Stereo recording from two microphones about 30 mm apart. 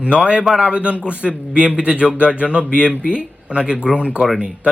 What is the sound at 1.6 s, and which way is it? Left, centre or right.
Speech, right.